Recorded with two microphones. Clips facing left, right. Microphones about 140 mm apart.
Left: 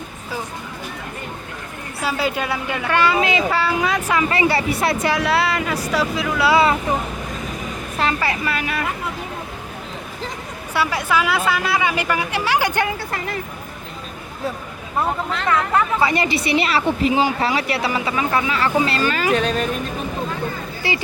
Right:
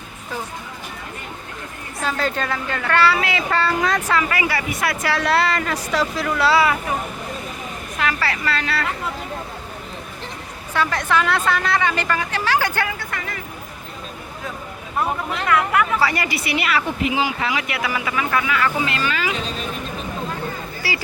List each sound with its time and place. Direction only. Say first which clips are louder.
2.0 s speech: left 1 dB; 10° left (ahead or behind)
3.5 s speech: even; 5° left (ahead or behind)
4.1 s a woman's voice: left 3 dB; 25° left (ahead or behind)
5.2 s speech: even; 5° left (ahead or behind)
6.5 s a woman's voice: left 2 dB; 25° left (ahead or behind)
8.2 s speech: left 1 dB; 15° left (ahead or behind)
10.8 s speech: even; 10° left (ahead or behind)
13.0 s speech: left 3 dB; 30° left (ahead or behind)
15.4 s a woman's voice: even; 25° left (ahead or behind)
19.3 s speech: left 8 dB; 65° left (ahead or behind)
20.8 s a woman's voice: left 4 dB; 20° left (ahead or behind)